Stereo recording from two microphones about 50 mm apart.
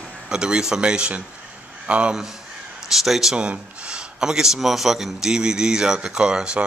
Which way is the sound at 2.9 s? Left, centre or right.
Centre.